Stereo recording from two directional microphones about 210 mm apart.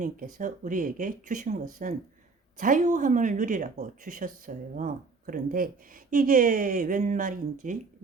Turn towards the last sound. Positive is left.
turn(degrees=-40)  # may be behind; listen again after turning